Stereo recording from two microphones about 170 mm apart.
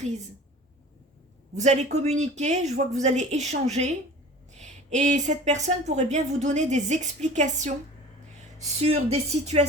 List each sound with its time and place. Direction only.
1.5 s a woman's voice: 40° right (ahead or behind)
8.8 s speech: 35° right (ahead or behind)